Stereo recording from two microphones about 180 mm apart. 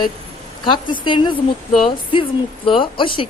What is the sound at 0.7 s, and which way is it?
Speech, 25° left (ahead or behind).